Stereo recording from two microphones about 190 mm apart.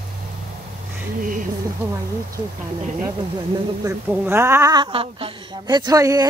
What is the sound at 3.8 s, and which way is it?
A woman's voice, 10° right (ahead or behind).